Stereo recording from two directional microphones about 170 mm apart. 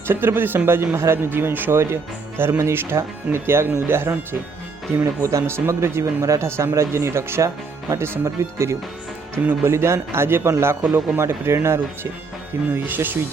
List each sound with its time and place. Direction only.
0.1 s speech: 15° right (ahead or behind)